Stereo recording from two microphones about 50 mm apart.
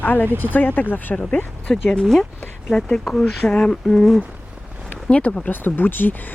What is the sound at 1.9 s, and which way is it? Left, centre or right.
Speech, centre.